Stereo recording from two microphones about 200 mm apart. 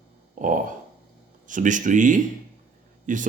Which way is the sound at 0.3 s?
40° right (ahead or behind).